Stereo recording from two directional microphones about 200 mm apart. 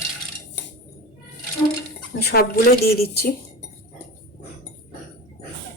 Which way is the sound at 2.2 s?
50° left (ahead or behind).